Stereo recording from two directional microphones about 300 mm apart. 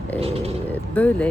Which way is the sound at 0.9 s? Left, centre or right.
Centre.